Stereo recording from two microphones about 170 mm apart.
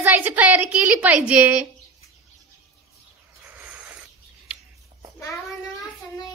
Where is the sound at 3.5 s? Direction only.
10° right (ahead or behind).